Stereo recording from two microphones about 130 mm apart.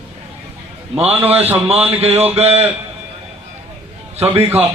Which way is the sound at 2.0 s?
50° right (ahead or behind).